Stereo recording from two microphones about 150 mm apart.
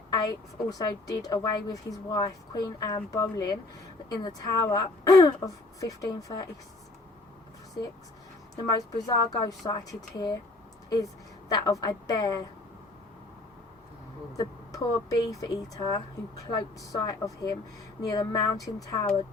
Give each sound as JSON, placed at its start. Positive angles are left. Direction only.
{"t": 0.1, "sound": "a woman's voice", "side_deg": 25}
{"t": 8.5, "sound": "a woman's voice", "side_deg": 25}
{"t": 14.3, "sound": "a woman's voice", "side_deg": 25}